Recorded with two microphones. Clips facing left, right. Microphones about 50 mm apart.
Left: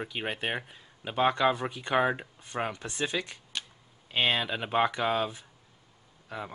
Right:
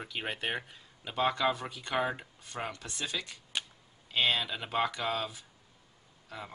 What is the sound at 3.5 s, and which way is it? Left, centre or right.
Camera, centre.